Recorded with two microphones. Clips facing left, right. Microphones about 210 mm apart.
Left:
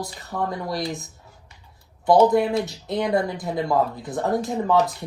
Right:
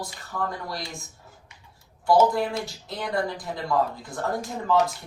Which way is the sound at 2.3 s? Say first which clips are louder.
Left 7 dB; 20° left (ahead or behind).